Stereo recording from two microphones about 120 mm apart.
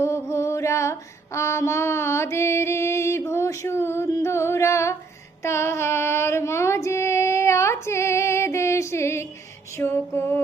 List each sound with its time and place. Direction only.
0.0 s female singing: 25° left (ahead or behind)
5.4 s child singing: 25° left (ahead or behind)
9.7 s music: 20° left (ahead or behind)